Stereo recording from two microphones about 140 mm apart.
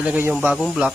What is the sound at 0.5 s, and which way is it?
Speech, centre (ahead or behind).